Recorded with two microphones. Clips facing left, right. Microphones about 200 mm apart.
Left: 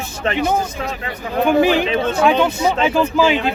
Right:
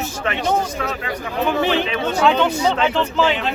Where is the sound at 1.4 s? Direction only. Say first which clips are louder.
Left 5 dB; 10° left (ahead or behind).